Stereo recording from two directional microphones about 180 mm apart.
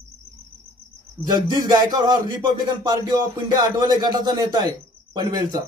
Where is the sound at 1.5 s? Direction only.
25° right (ahead or behind).